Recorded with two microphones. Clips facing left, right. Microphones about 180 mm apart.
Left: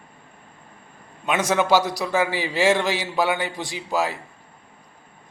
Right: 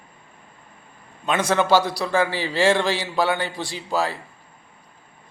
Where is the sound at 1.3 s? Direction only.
15° left (ahead or behind).